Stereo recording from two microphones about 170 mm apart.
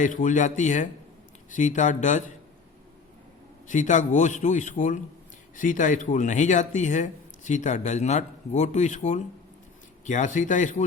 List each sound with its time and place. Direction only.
0.0 s speech: 50° left (ahead or behind)
3.7 s speech: 45° left (ahead or behind)